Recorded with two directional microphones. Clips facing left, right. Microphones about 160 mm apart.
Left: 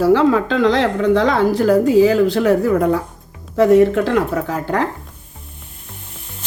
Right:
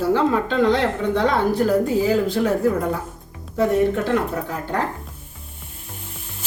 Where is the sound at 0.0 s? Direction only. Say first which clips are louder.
Left 6 dB; 90° left.